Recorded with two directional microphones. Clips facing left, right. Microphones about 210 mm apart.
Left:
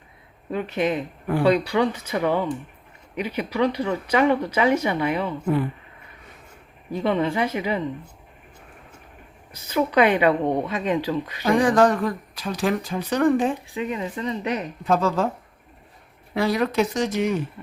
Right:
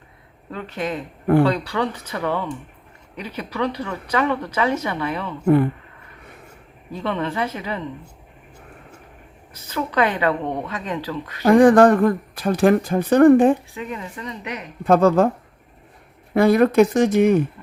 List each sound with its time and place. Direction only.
0.5 s speech: 15° left (ahead or behind)
6.9 s speech: 15° left (ahead or behind)
9.5 s speech: 15° left (ahead or behind)
11.4 s speech: 55° right (ahead or behind)
13.7 s speech: 20° left (ahead or behind)
14.8 s speech: 55° right (ahead or behind)
16.3 s speech: 55° right (ahead or behind)